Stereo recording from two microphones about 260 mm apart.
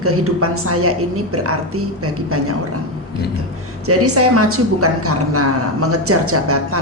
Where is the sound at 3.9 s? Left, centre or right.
Right.